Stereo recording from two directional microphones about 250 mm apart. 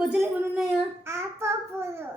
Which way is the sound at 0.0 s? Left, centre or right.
Centre.